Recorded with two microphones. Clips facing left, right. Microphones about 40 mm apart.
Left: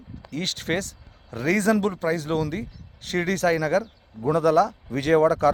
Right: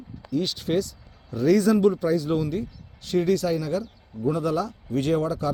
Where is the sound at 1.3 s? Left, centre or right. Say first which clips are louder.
Right 2 dB; left.